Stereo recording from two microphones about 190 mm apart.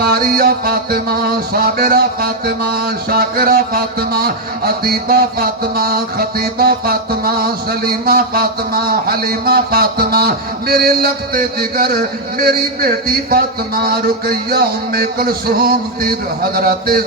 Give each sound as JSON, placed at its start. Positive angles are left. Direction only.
{"t": 0.0, "sound": "music", "side_deg": -50}